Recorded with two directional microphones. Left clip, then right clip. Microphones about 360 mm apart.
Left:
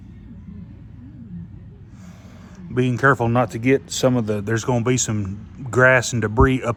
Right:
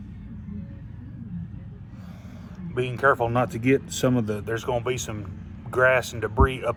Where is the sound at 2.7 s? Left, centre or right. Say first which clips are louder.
Left 4 dB; left.